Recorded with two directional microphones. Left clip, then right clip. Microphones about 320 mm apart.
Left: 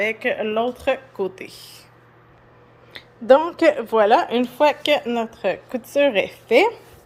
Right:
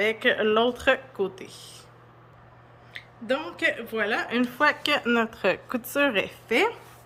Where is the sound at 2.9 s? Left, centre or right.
Centre.